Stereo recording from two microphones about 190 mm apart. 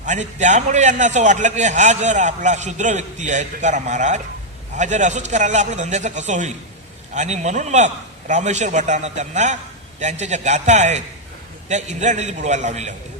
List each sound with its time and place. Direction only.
0.0 s a man's voice: 40° right (ahead or behind)